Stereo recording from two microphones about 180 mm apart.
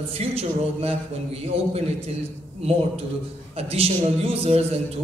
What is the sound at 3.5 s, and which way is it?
Speech, 35° right (ahead or behind).